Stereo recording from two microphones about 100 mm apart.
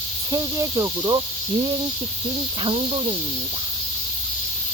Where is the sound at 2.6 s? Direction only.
65° right (ahead or behind).